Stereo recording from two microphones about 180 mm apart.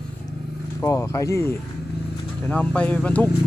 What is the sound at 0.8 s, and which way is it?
Speech, 15° left (ahead or behind).